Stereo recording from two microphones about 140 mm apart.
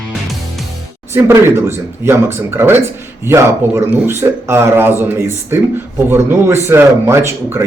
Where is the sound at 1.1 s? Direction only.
20° right (ahead or behind).